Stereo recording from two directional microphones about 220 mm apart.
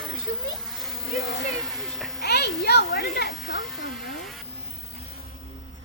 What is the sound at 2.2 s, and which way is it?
A child's voice, 50° left (ahead or behind).